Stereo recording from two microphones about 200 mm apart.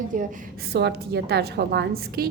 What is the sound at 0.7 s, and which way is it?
A woman's voice, 55° right (ahead or behind).